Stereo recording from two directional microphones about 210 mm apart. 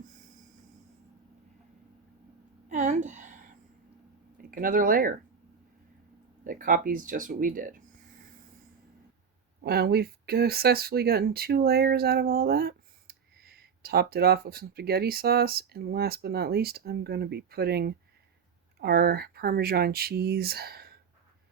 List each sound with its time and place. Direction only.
2.6 s a sound: 35° right (ahead or behind)
4.4 s speech: 40° right (ahead or behind)
6.4 s speech: 40° right (ahead or behind)
9.6 s speech: 45° right (ahead or behind)